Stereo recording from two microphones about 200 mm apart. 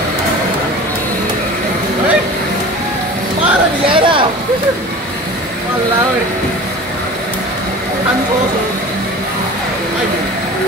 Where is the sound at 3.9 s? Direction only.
25° right (ahead or behind).